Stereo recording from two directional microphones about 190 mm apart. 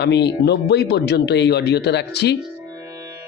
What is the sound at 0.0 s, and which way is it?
Speech, 65° left (ahead or behind).